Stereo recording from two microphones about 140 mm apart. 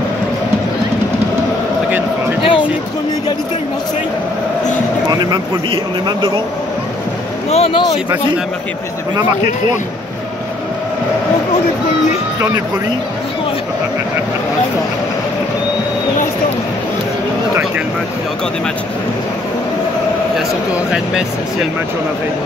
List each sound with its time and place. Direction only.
2.4 s a sound: 40° left (ahead or behind)
5.2 s speech: 30° right (ahead or behind)
7.5 s speech: 45° left (ahead or behind)